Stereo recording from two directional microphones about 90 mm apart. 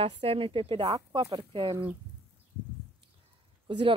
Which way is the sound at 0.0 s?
85° right.